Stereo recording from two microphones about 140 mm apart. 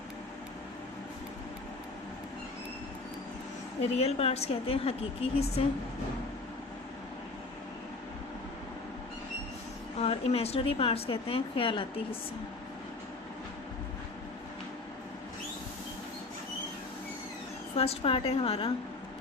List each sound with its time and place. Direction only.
3.9 s speech: 45° left (ahead or behind)
10.0 s speech: 45° left (ahead or behind)
17.7 s speech: 45° left (ahead or behind)